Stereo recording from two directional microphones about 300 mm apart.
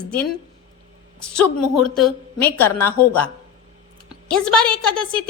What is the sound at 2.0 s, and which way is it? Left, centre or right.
Speech, centre.